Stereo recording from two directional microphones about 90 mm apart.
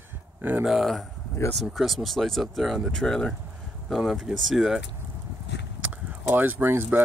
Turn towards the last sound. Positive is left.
turn(degrees=-25)  # may be behind; listen again after turning